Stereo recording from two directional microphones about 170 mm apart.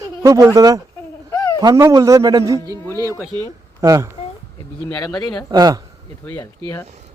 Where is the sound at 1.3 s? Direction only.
20° left (ahead or behind).